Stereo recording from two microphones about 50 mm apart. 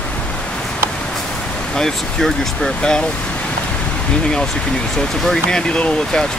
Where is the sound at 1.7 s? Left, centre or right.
Centre.